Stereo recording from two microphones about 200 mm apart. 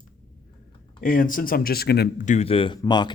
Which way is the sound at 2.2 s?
35° left (ahead or behind).